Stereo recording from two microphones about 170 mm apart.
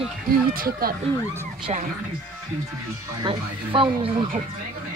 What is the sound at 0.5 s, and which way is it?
Speech, 55° right (ahead or behind).